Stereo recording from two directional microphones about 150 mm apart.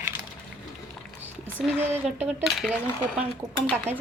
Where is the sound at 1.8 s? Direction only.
15° right (ahead or behind).